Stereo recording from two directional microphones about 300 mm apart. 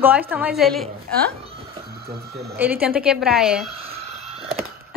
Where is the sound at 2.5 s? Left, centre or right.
Centre.